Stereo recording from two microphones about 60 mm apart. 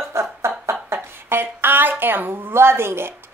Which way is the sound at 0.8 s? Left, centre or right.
Right.